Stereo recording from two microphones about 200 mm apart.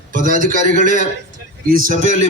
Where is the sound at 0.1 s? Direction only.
40° right (ahead or behind).